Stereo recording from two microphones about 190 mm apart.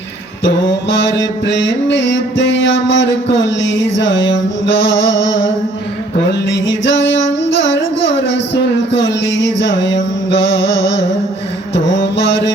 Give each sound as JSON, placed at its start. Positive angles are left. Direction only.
{"t": 0.4, "sound": "mantra", "side_deg": 65}
{"t": 1.5, "sound": "a sound", "side_deg": 65}
{"t": 11.7, "sound": "mantra", "side_deg": 70}